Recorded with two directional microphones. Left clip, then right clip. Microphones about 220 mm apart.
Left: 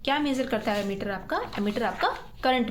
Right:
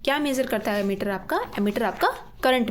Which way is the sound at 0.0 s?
50° right (ahead or behind).